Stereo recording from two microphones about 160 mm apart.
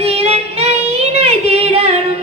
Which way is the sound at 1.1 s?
40° right (ahead or behind).